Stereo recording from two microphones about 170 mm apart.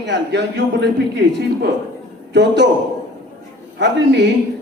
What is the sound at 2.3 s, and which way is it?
Speech, 90° right.